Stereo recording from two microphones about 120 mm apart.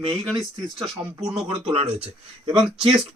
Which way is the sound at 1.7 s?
50° right (ahead or behind).